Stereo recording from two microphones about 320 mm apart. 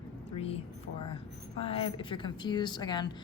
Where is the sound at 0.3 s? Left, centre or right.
Centre.